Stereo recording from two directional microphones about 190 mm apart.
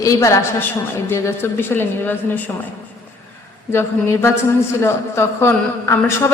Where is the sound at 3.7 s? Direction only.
15° left (ahead or behind).